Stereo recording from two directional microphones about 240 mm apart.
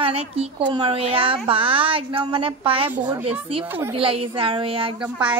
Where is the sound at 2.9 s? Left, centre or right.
Centre.